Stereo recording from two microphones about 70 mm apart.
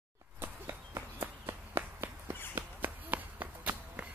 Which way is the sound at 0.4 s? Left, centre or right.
Right.